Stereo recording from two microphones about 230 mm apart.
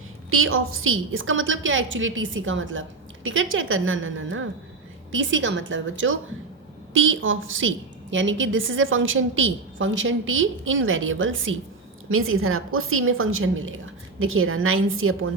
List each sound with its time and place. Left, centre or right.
0.3 s a woman's voice: right